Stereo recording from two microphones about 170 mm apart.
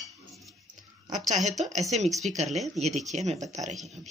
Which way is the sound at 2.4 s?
Centre (ahead or behind).